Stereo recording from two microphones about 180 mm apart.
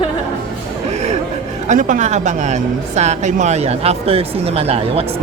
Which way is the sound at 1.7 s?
45° right (ahead or behind).